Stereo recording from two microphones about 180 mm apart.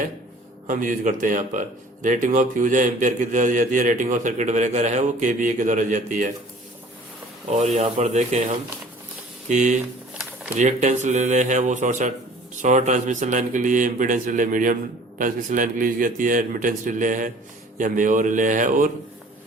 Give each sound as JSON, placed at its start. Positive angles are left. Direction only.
{"t": 0.7, "sound": "speech", "side_deg": -50}
{"t": 7.5, "sound": "speech", "side_deg": -40}